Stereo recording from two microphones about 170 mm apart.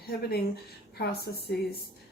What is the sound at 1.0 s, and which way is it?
Speech, 70° left (ahead or behind).